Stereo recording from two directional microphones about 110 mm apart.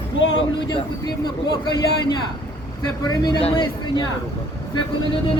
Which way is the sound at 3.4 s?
50° left (ahead or behind).